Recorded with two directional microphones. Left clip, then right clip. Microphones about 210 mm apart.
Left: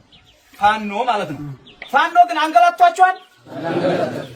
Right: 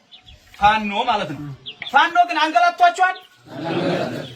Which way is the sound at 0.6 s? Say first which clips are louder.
Even; 50° left (ahead or behind).